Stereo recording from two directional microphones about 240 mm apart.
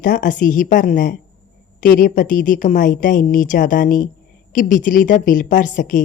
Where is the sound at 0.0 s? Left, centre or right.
Left.